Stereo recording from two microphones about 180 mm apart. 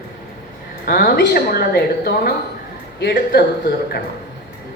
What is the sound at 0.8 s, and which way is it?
Speech, 55° left (ahead or behind).